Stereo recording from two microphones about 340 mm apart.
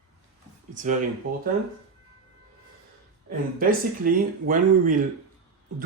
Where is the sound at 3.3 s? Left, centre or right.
Right.